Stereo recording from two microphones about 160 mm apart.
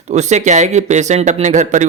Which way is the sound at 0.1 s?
45° right (ahead or behind).